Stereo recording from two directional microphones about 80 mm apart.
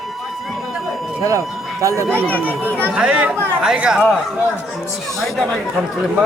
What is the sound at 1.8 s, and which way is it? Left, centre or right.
Speech, right.